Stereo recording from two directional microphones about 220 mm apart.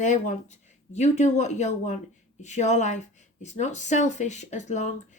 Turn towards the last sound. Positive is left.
turn(degrees=30)  # may be behind; listen again after turning